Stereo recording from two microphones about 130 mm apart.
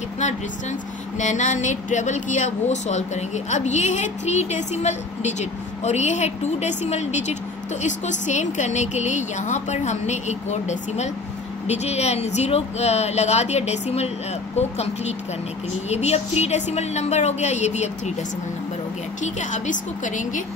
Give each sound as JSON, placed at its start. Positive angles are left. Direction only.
{"t": 0.2, "sound": "speech", "side_deg": 65}
{"t": 19.2, "sound": "a woman's voice", "side_deg": 65}